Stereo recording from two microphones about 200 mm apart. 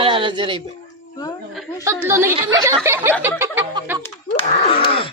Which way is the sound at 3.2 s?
10° right (ahead or behind).